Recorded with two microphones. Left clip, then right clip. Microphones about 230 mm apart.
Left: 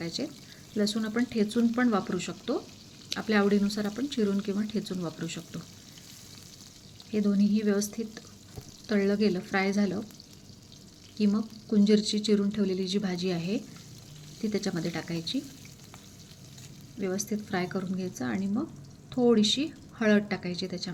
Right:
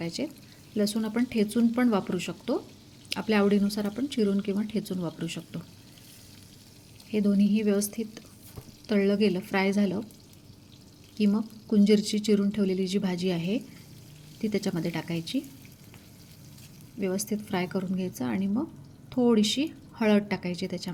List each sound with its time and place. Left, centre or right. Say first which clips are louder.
0.0 s speech: right 1 dB; centre
7.1 s speech: right 2 dB; centre
11.3 s speech: right 2 dB; centre
17.0 s speech: right 2 dB; centre